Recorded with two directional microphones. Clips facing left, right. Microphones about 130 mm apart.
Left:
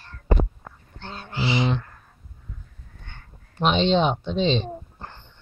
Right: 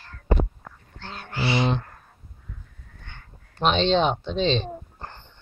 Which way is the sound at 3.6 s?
10° left (ahead or behind).